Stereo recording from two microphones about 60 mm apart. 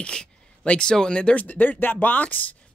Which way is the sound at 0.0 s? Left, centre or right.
Centre.